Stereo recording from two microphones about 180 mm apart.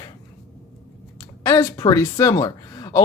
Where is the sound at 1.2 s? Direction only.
20° left (ahead or behind).